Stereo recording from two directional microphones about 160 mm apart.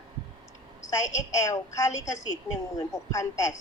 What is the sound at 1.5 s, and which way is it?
Speech, 20° left (ahead or behind).